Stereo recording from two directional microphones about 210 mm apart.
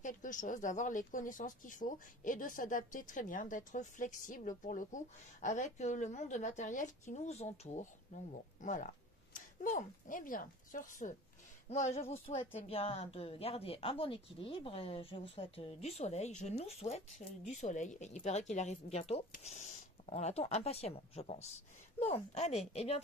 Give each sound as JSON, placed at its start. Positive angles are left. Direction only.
{"t": 0.0, "sound": "speech", "side_deg": 40}